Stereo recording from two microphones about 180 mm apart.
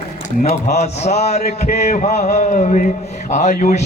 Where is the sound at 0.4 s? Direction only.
35° left (ahead or behind).